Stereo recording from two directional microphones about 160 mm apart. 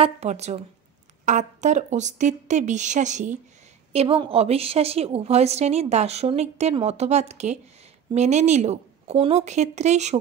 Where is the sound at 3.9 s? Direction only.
35° right (ahead or behind).